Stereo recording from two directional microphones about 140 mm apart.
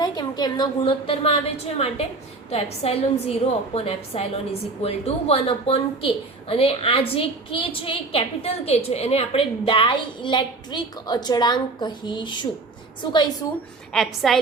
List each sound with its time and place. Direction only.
0.0 s a woman's voice: 30° left (ahead or behind)
13.9 s a woman's voice: centre (ahead or behind)